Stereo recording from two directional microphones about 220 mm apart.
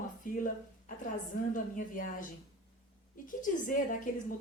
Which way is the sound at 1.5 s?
40° left (ahead or behind).